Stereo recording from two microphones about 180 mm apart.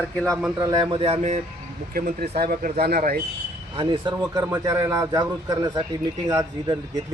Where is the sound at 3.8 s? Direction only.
25° right (ahead or behind).